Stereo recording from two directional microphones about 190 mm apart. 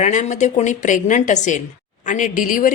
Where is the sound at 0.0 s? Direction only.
40° left (ahead or behind).